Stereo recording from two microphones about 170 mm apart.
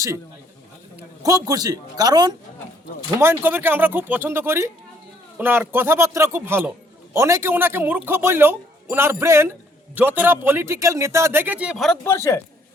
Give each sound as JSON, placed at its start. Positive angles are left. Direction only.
{"t": 1.2, "sound": "a man's voice", "side_deg": -20}
{"t": 12.0, "sound": "a man's voice", "side_deg": 15}